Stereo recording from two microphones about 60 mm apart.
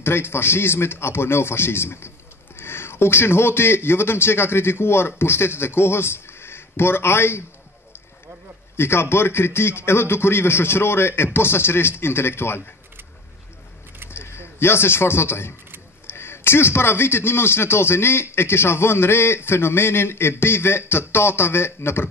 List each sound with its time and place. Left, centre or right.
0.0 s a man's voice: left
8.7 s a man's voice: left
14.1 s a man's voice: left